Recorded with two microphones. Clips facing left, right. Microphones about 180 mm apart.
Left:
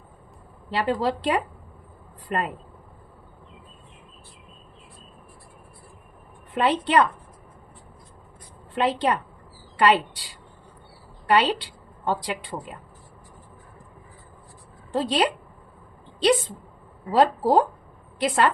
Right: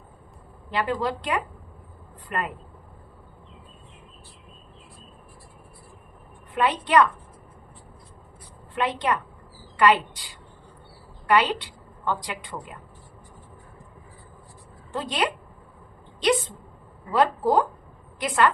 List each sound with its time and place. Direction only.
0.7 s a woman's voice: 30° left (ahead or behind)
6.6 s a woman's voice: 30° left (ahead or behind)
8.7 s a woman's voice: 30° left (ahead or behind)
14.9 s a woman's voice: 30° left (ahead or behind)
16.2 s a sound: 35° left (ahead or behind)
17.1 s a woman's voice: 30° left (ahead or behind)